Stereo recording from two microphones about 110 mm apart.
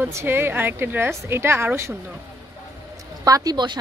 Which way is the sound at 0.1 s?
20° right (ahead or behind).